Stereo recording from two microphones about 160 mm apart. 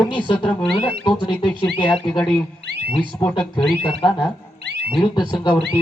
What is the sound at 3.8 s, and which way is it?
A man's voice, 30° left (ahead or behind).